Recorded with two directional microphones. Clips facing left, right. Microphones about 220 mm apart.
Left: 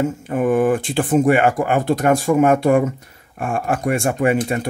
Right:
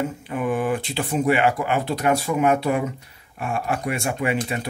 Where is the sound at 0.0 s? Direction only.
45° left (ahead or behind).